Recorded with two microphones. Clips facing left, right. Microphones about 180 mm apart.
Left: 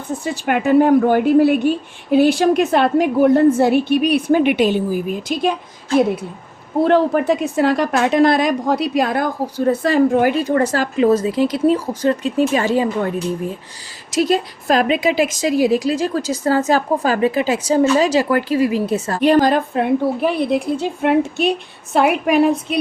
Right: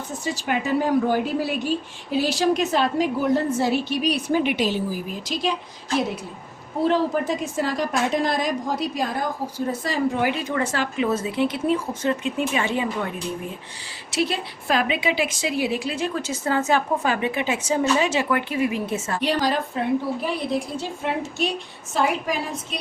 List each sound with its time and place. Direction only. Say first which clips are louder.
0.3 s a woman's voice: left 10 dB; 60° left (ahead or behind)
6.8 s a woman's voice: left 6 dB; 60° left (ahead or behind); by 13.1 s 40° left (ahead or behind)
14.1 s a woman's voice: left 8 dB; 40° left (ahead or behind)
19.2 s a woman's voice: left 10 dB; 50° left (ahead or behind)